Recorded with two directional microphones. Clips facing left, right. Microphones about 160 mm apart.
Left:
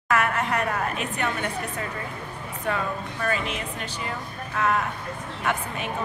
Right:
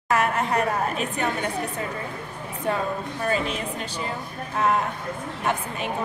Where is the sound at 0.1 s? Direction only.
30° right (ahead or behind).